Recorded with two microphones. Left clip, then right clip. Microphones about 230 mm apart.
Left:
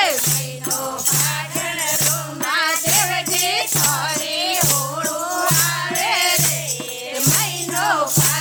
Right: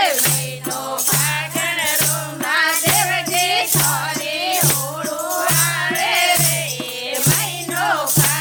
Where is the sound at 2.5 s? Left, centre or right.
Centre.